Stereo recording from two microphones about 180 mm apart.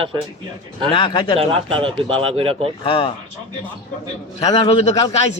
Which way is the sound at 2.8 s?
30° left (ahead or behind).